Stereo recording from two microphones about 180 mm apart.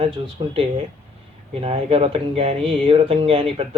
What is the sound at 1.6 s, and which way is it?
Speech, 30° right (ahead or behind).